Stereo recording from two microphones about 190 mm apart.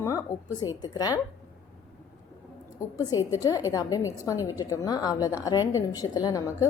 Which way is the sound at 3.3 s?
20° left (ahead or behind).